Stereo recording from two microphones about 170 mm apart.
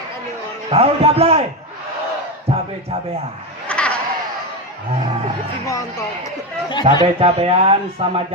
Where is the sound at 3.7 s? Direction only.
5° left (ahead or behind).